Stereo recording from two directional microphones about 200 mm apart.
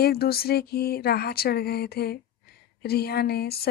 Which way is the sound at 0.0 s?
50° left (ahead or behind).